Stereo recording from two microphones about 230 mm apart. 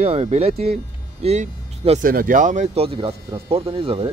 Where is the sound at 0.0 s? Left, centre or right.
Right.